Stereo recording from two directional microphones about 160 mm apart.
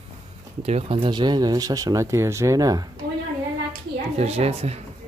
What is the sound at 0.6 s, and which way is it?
Speech, 35° right (ahead or behind).